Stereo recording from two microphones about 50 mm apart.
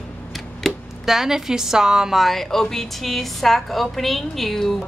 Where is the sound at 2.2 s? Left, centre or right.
Centre.